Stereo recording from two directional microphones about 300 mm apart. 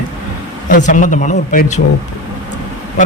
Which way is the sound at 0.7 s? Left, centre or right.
Left.